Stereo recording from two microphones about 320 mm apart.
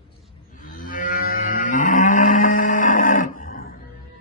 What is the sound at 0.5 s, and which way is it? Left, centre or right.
Cattle, left.